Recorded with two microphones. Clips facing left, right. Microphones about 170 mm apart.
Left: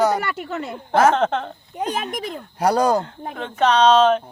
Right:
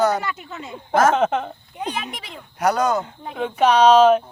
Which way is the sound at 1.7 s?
45° left (ahead or behind).